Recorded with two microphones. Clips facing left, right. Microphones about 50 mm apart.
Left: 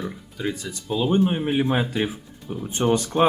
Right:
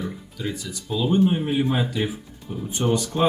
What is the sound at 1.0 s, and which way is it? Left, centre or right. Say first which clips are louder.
Speech: right 1 dB; left.